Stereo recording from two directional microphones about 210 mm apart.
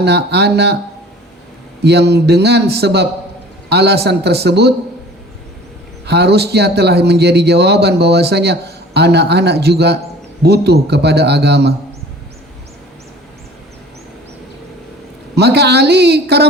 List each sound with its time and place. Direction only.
0.0 s speech: 50° right (ahead or behind)
1.8 s speech: 50° right (ahead or behind)
6.1 s speech: 50° right (ahead or behind)
15.4 s speech: 50° right (ahead or behind)